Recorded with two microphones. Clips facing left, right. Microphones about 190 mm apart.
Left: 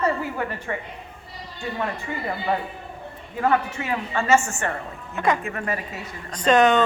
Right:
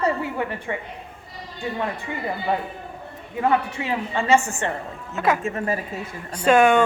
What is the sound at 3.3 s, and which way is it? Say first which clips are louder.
A woman's voice: right 1 dB; 20° right (ahead or behind).